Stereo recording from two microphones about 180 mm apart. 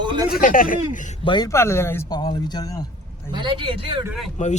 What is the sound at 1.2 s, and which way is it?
Speech, 25° left (ahead or behind).